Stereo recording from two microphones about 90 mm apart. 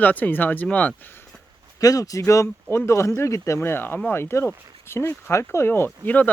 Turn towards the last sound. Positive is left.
turn(degrees=20)  # may be behind; listen again after turning